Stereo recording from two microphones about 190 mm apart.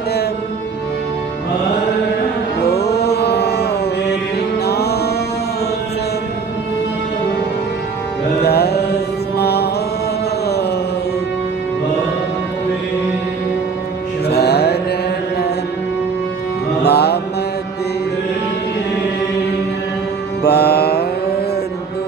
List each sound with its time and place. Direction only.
2.6 s music: 60° left (ahead or behind)
4.6 s music: 60° left (ahead or behind)
8.4 s music: 55° left (ahead or behind)
14.2 s music: 60° left (ahead or behind)
16.8 s music: 60° left (ahead or behind)
20.4 s music: 60° left (ahead or behind)